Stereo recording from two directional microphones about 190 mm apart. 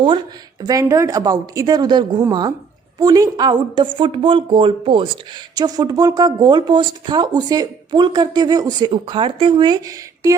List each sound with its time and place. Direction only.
0.6 s speech: 20° right (ahead or behind)